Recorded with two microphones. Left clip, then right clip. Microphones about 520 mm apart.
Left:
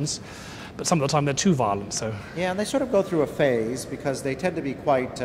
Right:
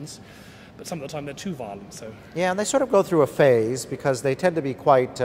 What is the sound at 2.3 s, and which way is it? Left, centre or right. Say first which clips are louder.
A man's voice: right 4 dB; right.